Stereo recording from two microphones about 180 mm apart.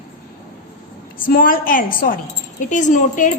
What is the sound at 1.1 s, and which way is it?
A woman's voice, 50° left (ahead or behind).